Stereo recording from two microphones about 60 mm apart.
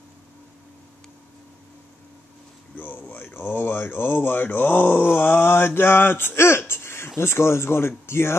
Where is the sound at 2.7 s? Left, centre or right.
Left.